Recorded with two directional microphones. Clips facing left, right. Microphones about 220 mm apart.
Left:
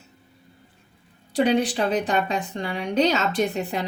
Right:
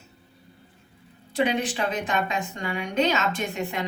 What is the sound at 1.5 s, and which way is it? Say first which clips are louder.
Speech: left 5 dB; 35° left (ahead or behind).